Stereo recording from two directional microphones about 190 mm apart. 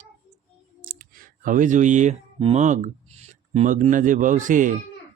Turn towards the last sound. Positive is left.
turn(degrees=-45)  # may be behind; listen again after turning